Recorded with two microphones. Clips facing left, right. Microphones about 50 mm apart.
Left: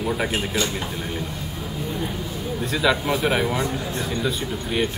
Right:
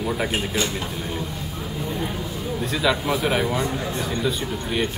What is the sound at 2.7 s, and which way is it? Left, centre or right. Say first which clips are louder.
Speech: left 1 dB; centre.